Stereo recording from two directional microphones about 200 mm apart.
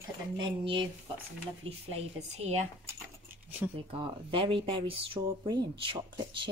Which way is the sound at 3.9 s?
25° right (ahead or behind).